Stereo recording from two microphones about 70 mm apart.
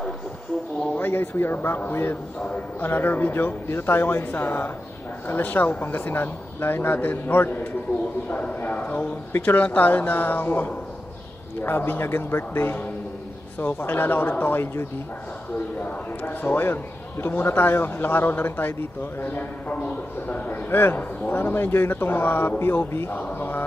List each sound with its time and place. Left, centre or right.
0.9 s a man's voice: left
8.3 s a man's voice: centre